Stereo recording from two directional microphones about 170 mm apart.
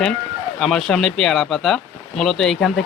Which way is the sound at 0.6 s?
Centre (ahead or behind).